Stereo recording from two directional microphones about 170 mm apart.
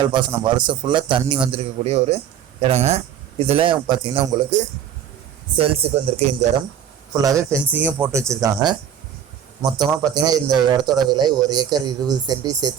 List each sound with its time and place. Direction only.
0.0 s a man's voice: 25° right (ahead or behind)
5.5 s speech: 35° right (ahead or behind)
7.1 s speech: 20° right (ahead or behind)
10.0 s a man's voice: 20° right (ahead or behind)